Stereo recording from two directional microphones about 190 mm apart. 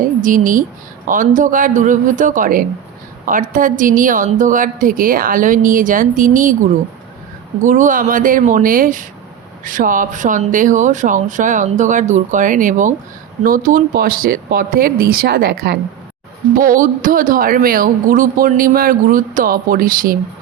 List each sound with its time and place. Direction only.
0.0 s a woman's voice: 45° right (ahead or behind)
7.6 s speech: 40° right (ahead or behind); by 15.8 s 60° right (ahead or behind)
16.6 s speech: 45° right (ahead or behind)